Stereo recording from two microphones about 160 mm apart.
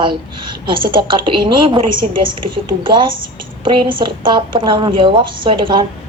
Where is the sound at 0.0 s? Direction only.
30° right (ahead or behind).